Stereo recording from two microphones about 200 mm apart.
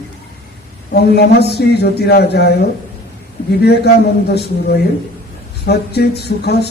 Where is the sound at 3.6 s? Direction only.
55° left (ahead or behind).